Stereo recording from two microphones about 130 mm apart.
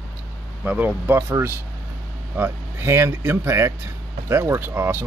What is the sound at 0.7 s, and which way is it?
Speech, 10° right (ahead or behind).